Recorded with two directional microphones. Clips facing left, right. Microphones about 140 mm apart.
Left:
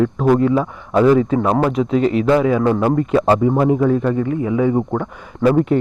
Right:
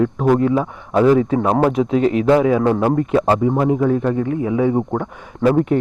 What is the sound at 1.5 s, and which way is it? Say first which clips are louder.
A man's voice: right 1 dB; 35° right (ahead or behind).